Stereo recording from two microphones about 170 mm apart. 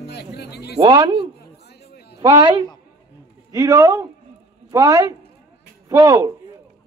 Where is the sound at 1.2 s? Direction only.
75° left (ahead or behind).